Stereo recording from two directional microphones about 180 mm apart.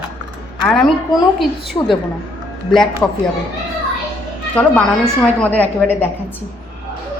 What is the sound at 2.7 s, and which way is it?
Speech, 5° left (ahead or behind).